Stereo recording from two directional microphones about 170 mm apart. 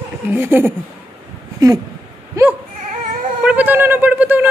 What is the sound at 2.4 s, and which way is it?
Goat, 20° right (ahead or behind).